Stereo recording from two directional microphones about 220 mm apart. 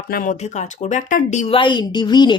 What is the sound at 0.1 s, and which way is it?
Speech, 40° left (ahead or behind).